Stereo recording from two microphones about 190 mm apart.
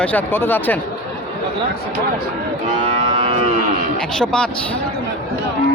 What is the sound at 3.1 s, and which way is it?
Cattle, 25° right (ahead or behind).